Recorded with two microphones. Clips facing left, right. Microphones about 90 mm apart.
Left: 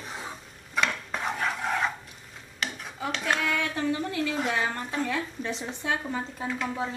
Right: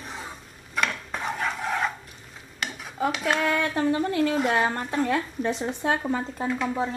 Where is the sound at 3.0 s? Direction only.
10° right (ahead or behind).